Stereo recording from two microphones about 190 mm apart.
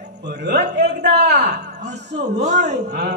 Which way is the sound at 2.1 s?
40° right (ahead or behind).